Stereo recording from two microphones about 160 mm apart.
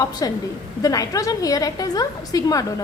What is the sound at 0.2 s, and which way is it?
A woman's voice, 25° left (ahead or behind).